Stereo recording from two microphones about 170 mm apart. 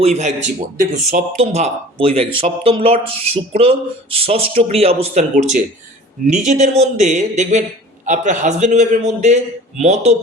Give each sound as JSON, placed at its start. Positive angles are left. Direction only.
{"t": 0.0, "sound": "a man's voice", "side_deg": -40}